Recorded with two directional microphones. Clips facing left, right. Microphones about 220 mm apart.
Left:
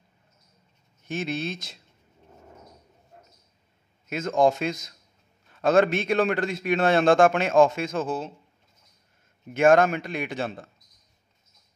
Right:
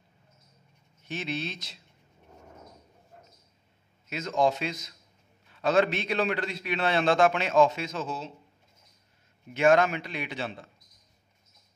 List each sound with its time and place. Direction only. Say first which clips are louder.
1.0 s a man's voice: left 4 dB; 50° left (ahead or behind)
4.1 s a man's voice: left 4 dB; 50° left (ahead or behind)
9.5 s a man's voice: left 4 dB; 50° left (ahead or behind)